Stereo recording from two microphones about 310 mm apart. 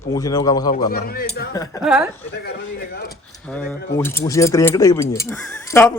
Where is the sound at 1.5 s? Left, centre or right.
Centre.